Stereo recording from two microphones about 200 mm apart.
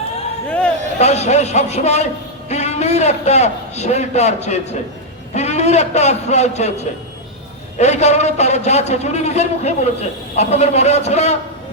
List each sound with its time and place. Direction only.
0.9 s a man's voice: 35° left (ahead or behind)